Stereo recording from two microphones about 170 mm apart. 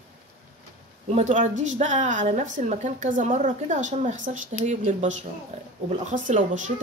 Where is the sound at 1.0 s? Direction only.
40° right (ahead or behind).